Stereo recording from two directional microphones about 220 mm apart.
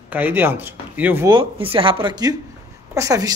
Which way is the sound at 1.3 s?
25° right (ahead or behind).